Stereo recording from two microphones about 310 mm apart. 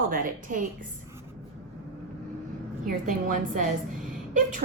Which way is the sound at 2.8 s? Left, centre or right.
Right.